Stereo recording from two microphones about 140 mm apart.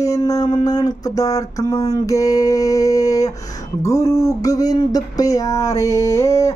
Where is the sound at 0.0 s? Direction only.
25° left (ahead or behind).